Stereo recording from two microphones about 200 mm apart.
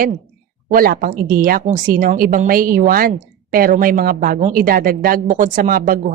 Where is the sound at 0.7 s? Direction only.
45° right (ahead or behind).